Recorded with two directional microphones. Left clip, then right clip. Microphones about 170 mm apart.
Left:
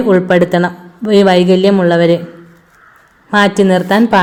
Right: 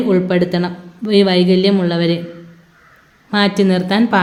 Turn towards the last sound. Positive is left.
turn(degrees=20)  # may be behind; listen again after turning